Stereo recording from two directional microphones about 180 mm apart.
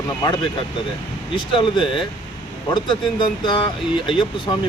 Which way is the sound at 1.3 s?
25° left (ahead or behind).